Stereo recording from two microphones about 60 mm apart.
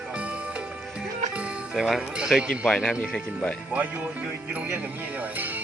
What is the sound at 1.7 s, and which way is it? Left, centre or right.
Speech, centre.